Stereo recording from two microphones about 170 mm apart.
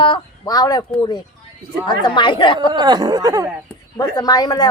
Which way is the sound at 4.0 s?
25° left (ahead or behind).